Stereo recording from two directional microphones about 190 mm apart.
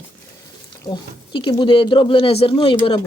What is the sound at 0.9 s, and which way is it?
Speech, 25° left (ahead or behind).